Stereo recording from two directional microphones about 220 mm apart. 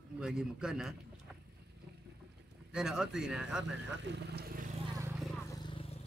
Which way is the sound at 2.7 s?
Centre (ahead or behind).